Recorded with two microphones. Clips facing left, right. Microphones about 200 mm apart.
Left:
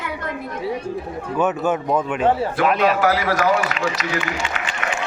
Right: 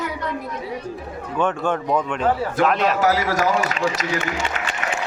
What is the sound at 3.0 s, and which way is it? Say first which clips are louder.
A man's voice: left 1 dB; 45° right (ahead or behind).